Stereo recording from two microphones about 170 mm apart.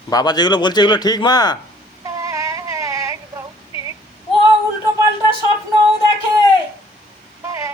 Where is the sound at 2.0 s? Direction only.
20° right (ahead or behind).